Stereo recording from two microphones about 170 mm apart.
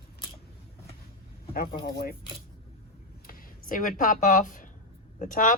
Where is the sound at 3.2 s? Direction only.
55° left (ahead or behind).